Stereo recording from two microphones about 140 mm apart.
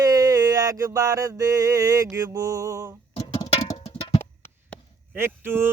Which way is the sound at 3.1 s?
45° left (ahead or behind).